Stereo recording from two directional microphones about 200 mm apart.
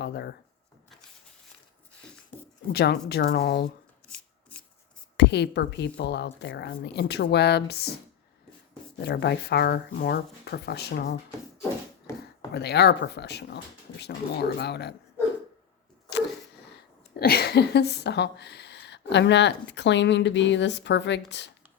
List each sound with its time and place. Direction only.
0.0 s speech: 55° left (ahead or behind)
2.0 s a sound: 5° left (ahead or behind)
2.7 s a woman's voice: 55° left (ahead or behind)
5.1 s speech: 60° left (ahead or behind)
9.0 s speech: 55° left (ahead or behind)
12.5 s speech: 55° left (ahead or behind)
17.2 s speech: 50° left (ahead or behind)